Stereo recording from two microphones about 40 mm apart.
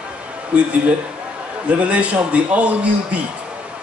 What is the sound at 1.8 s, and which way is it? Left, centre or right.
Speech, right.